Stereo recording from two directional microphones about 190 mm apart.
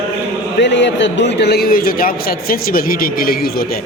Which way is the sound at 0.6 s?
70° left (ahead or behind).